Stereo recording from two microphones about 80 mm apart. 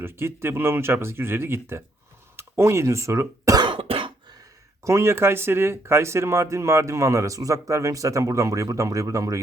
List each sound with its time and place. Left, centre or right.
0.0 s speech: right
3.5 s cough: right
4.8 s speech: right